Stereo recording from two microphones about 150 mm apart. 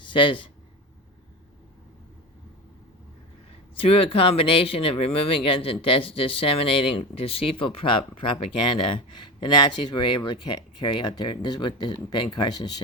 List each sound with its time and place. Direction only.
0.0 s speech: 35° left (ahead or behind)
3.8 s speech: 40° left (ahead or behind)